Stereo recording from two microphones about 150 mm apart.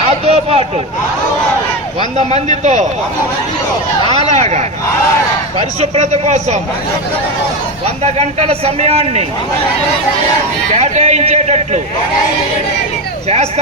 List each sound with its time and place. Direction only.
0.0 s a sound: 45° right (ahead or behind)
2.1 s a man's voice: 50° right (ahead or behind)
4.3 s a man's voice: 45° right (ahead or behind)
8.0 s a man's voice: 45° right (ahead or behind)
10.7 s a man's voice: 50° right (ahead or behind)
13.2 s a man's voice: 45° right (ahead or behind)